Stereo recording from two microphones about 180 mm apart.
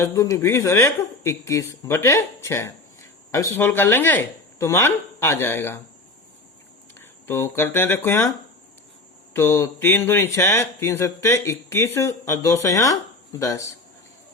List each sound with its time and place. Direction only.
0.0 s speech: 20° left (ahead or behind)
7.0 s speech: 15° left (ahead or behind)
9.3 s speech: 15° left (ahead or behind)